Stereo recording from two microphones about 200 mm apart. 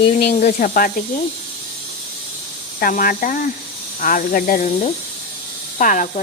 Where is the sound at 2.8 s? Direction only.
45° left (ahead or behind).